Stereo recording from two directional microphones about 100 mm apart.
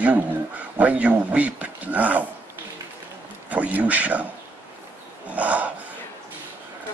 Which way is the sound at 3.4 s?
15° right (ahead or behind).